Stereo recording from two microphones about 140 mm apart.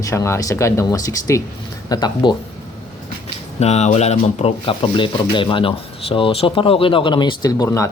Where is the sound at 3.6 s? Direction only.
50° left (ahead or behind); by 7.9 s 25° left (ahead or behind).